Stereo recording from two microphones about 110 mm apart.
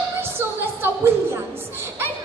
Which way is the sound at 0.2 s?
20° right (ahead or behind).